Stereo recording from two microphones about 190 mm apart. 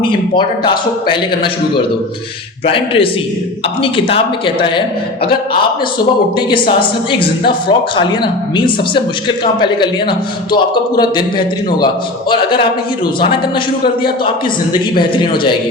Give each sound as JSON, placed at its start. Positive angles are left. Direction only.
{"t": 0.0, "sound": "speech", "side_deg": 25}
{"t": 2.6, "sound": "speech", "side_deg": 30}
{"t": 6.3, "sound": "speech", "side_deg": 25}